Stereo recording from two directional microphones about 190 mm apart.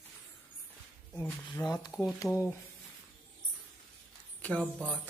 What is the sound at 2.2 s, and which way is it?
Speech, centre (ahead or behind).